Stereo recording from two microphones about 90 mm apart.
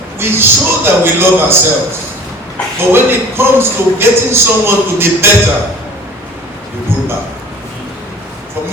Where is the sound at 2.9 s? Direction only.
25° right (ahead or behind).